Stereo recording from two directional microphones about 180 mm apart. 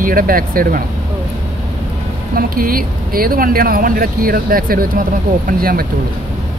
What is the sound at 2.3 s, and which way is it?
Speech, 55° right (ahead or behind).